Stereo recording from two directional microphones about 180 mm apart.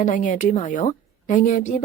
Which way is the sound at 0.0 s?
45° left (ahead or behind).